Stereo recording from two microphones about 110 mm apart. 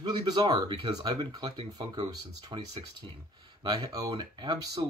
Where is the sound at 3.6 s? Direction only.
40° right (ahead or behind).